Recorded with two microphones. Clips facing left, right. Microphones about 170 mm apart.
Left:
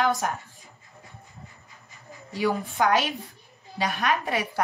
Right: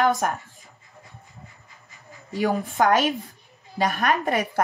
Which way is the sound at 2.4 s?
50° right (ahead or behind).